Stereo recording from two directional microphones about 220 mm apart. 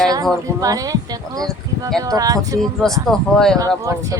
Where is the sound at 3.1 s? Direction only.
Centre (ahead or behind).